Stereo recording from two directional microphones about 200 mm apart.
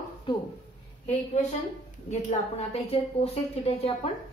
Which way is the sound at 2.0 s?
35° left (ahead or behind).